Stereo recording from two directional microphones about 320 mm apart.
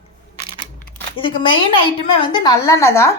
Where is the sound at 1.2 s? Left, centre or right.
Centre.